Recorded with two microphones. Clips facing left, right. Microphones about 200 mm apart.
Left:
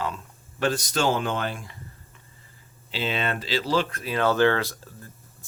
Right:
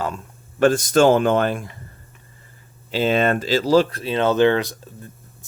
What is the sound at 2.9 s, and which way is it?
Speech, 45° right (ahead or behind).